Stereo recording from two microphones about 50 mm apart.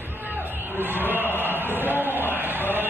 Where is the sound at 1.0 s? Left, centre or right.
Right.